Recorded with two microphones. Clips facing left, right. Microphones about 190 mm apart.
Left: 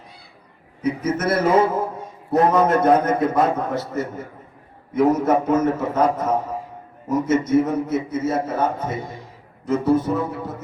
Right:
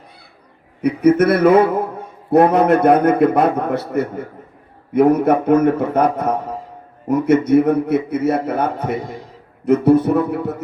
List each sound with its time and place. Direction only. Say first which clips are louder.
0.8 s speech: right 9 dB; 60° right (ahead or behind)